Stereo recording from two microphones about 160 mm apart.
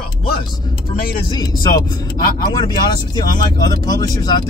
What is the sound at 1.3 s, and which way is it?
Speech, 25° left (ahead or behind).